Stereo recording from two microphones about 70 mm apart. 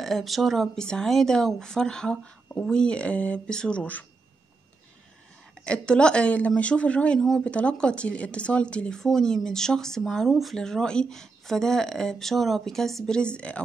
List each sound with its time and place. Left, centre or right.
0.0 s speech: centre
5.7 s speech: centre
7.2 s speech: centre
7.4 s speech: centre